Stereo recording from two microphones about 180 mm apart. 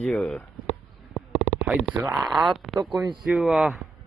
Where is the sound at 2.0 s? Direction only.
15° right (ahead or behind).